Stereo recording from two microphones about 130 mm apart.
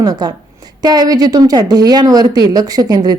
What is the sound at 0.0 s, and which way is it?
A woman's voice, 30° right (ahead or behind).